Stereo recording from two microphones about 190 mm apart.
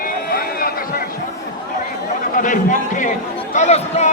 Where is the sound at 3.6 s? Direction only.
35° left (ahead or behind).